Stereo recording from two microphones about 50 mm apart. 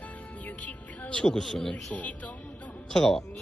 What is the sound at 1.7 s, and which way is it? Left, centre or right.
Speech, left.